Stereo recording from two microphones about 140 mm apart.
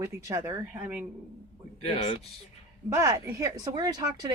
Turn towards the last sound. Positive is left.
turn(degrees=-30)  # may be behind; listen again after turning